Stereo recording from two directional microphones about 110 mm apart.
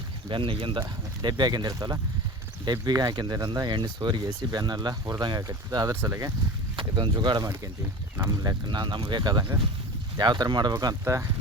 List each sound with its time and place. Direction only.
0.3 s speech: 50° right (ahead or behind); by 5.9 s 35° right (ahead or behind)
5.9 s speech: 25° right (ahead or behind)
6.7 s speech: 45° right (ahead or behind)
11.0 s speech: 25° right (ahead or behind)